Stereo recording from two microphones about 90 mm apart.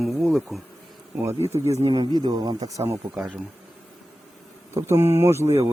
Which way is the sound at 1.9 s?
55° right (ahead or behind).